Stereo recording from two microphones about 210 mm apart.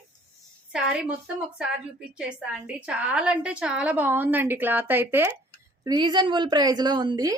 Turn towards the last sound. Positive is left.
turn(degrees=-20)  # may be behind; listen again after turning